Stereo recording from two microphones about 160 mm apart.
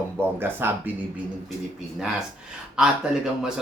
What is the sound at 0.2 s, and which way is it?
Speech, 15° right (ahead or behind).